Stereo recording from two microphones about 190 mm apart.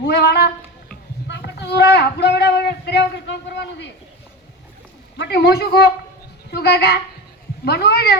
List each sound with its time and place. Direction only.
0.0 s speech: 60° left (ahead or behind)
1.3 s a sound: 60° left (ahead or behind)
5.1 s speech: 65° left (ahead or behind)